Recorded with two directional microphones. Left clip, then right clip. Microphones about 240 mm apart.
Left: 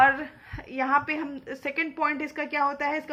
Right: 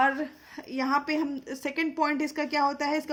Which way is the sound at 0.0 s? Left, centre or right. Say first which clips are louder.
Left 5 dB; right.